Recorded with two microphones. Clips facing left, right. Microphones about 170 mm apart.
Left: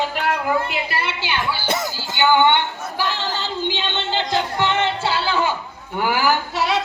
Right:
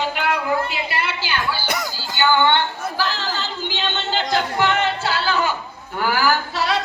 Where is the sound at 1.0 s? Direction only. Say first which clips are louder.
Even; 25° left (ahead or behind).